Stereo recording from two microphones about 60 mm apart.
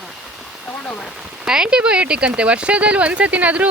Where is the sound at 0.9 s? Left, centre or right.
Centre.